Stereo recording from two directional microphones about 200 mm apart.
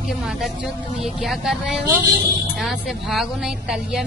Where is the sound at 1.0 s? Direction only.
Centre (ahead or behind).